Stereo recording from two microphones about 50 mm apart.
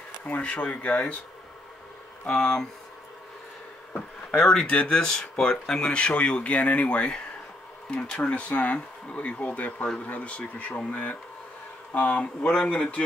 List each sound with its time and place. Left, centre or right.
0.2 s speech: left
2.2 s speech: centre
4.4 s speech: centre
4.6 s speech: left